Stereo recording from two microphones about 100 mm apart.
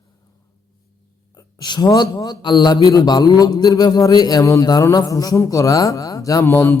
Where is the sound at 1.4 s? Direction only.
45° left (ahead or behind).